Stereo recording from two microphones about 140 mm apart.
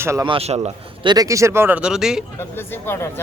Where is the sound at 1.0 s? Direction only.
25° right (ahead or behind); by 2.2 s 5° right (ahead or behind).